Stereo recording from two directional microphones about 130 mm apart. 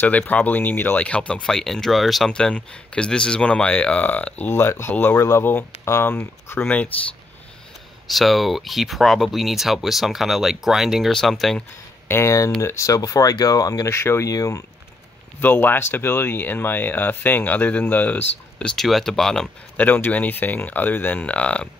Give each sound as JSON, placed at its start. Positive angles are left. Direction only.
{"t": 0.0, "sound": "speech", "side_deg": 15}
{"t": 8.1, "sound": "speech", "side_deg": 0}
{"t": 12.1, "sound": "speech", "side_deg": 20}